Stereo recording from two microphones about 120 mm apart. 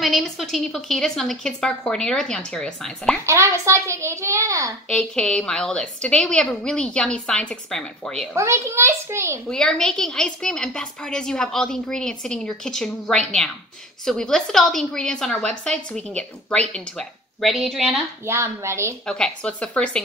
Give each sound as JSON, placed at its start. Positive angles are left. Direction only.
{"t": 0.0, "sound": "a woman's voice", "side_deg": 0}
{"t": 3.3, "sound": "a child's voice", "side_deg": -25}
{"t": 4.8, "sound": "a woman's voice", "side_deg": 10}
{"t": 8.3, "sound": "a child's voice", "side_deg": -25}
{"t": 9.5, "sound": "a woman's voice", "side_deg": 5}
{"t": 18.2, "sound": "a child's voice", "side_deg": -20}
{"t": 19.0, "sound": "a woman's voice", "side_deg": 5}